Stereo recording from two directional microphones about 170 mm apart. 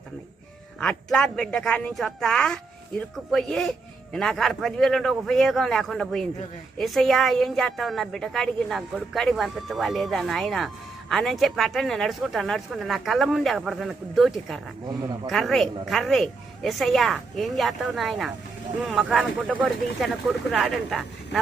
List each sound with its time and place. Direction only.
0.8 s a woman's voice: 5° left (ahead or behind)
14.8 s speech: 25° right (ahead or behind)
15.3 s a woman's voice: centre (ahead or behind)